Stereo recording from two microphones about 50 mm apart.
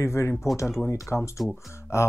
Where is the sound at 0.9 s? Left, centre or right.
Left.